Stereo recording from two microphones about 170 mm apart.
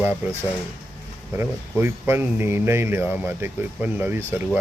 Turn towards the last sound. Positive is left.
turn(degrees=-10)  # may be behind; listen again after turning